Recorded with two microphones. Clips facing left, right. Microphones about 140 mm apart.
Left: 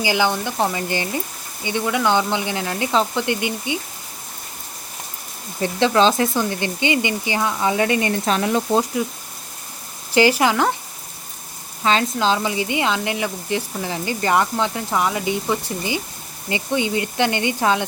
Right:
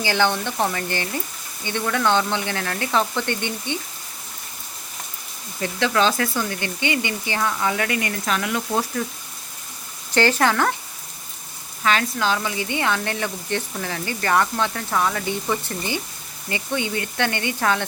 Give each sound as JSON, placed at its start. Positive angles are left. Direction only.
{"t": 0.0, "sound": "speech", "side_deg": 10}
{"t": 5.5, "sound": "speech", "side_deg": 25}
{"t": 10.2, "sound": "speech", "side_deg": 10}
{"t": 11.8, "sound": "speech", "side_deg": 25}